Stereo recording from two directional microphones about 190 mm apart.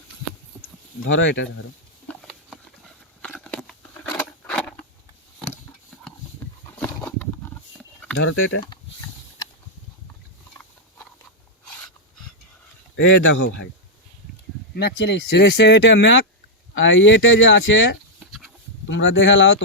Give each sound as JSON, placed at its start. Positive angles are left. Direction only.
{"t": 1.0, "sound": "speech", "side_deg": 75}
{"t": 2.0, "sound": "patter", "side_deg": 5}
{"t": 6.7, "sound": "a sound", "side_deg": 10}
{"t": 8.1, "sound": "speech", "side_deg": 80}
{"t": 13.0, "sound": "speech", "side_deg": 90}
{"t": 14.8, "sound": "speech", "side_deg": 65}
{"t": 16.7, "sound": "speech", "side_deg": 85}
{"t": 18.3, "sound": "pig", "side_deg": 0}
{"t": 18.9, "sound": "speech", "side_deg": 75}